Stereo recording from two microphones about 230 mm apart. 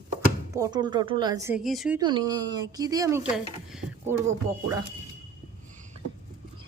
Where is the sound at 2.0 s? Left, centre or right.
Centre.